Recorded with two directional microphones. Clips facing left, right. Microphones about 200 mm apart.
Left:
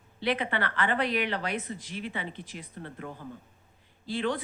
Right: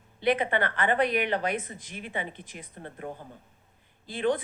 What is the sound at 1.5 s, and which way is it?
Speech, 50° right (ahead or behind).